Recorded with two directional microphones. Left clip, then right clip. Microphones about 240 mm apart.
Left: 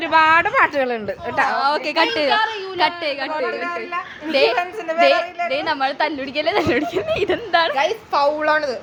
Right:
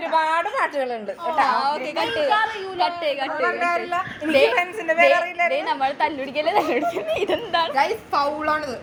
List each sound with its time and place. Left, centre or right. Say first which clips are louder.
0.1 s a sound: left 7 dB; left
1.4 s a woman's voice: left 2 dB; left
3.6 s a woman's voice: right 3 dB; centre
4.3 s a woman's voice: left 1 dB; centre
4.9 s a woman's voice: left 2 dB; left
7.8 s a woman's voice: left 2 dB; centre